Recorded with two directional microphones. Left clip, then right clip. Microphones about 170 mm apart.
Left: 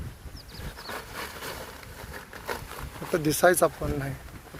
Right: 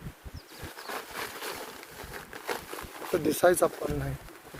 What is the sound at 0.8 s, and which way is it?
Vehicle, 35° right (ahead or behind).